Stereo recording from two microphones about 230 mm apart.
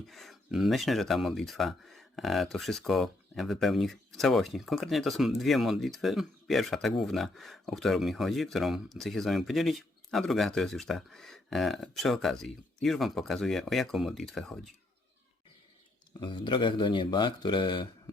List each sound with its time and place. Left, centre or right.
0.1 s speech: centre
16.2 s speech: centre